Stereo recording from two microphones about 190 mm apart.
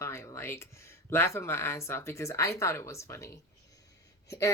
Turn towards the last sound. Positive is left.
turn(degrees=15)  # may be behind; listen again after turning